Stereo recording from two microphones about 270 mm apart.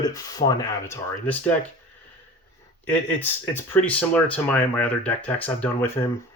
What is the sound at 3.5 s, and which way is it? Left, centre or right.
Speech, centre.